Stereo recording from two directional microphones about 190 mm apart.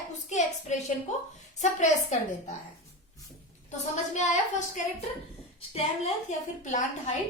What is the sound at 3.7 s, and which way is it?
A woman's voice, 40° left (ahead or behind).